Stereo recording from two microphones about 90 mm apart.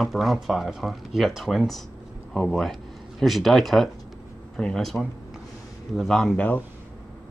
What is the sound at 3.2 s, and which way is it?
Speech, centre (ahead or behind).